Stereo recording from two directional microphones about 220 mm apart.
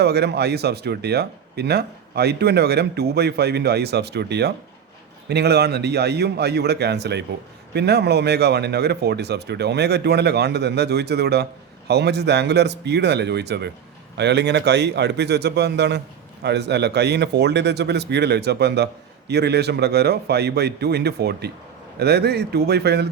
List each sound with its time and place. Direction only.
0.0 s speech: 50° right (ahead or behind)